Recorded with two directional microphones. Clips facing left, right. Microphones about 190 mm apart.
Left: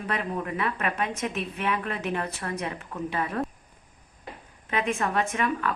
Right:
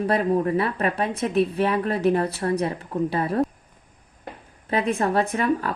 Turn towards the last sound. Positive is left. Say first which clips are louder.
# right 4 dB
turn(degrees=-35)  # may be behind; listen again after turning